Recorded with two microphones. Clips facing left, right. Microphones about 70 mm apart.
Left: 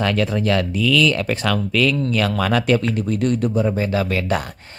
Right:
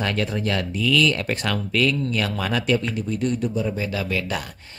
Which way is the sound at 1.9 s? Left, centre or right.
Left.